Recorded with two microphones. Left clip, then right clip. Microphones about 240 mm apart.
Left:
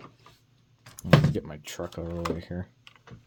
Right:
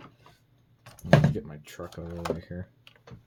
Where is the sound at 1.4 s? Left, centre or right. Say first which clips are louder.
Left 4 dB; left.